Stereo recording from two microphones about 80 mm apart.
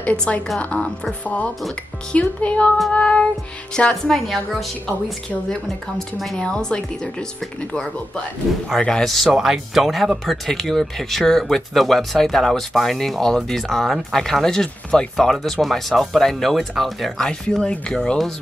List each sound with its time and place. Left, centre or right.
0.0 s speech: centre
8.6 s speech: centre